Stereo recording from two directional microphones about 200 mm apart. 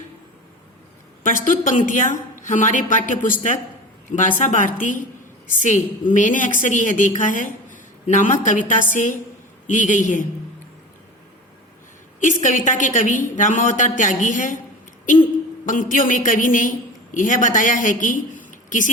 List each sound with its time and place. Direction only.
1.2 s a man's voice: 40° left (ahead or behind)
9.6 s a man's voice: 40° left (ahead or behind)
12.2 s a man's voice: 40° left (ahead or behind)
15.6 s a man's voice: 40° left (ahead or behind)